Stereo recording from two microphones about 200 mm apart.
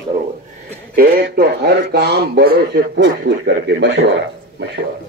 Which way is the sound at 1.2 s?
55° right (ahead or behind).